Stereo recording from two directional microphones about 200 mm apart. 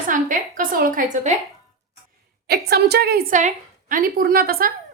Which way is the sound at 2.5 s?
55° right (ahead or behind).